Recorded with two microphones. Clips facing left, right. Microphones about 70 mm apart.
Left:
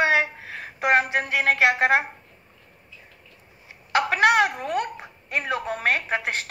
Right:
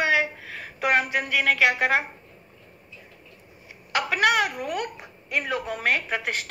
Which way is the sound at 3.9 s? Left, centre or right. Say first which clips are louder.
Left 3 dB; left.